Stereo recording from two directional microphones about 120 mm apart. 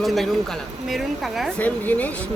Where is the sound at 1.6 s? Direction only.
10° left (ahead or behind).